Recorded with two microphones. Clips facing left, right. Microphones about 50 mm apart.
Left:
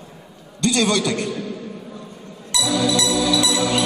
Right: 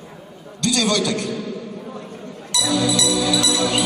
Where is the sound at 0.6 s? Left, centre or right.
Left.